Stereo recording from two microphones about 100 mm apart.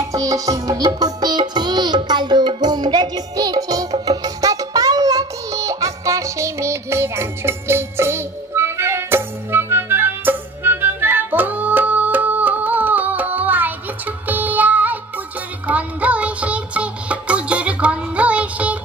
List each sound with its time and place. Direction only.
0.1 s music: 35° right (ahead or behind); by 18.8 s 15° right (ahead or behind)